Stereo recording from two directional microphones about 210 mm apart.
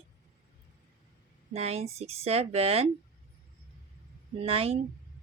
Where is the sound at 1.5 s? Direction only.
30° right (ahead or behind).